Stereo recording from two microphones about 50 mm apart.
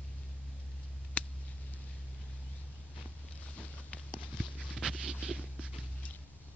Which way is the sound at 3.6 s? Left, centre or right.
Left.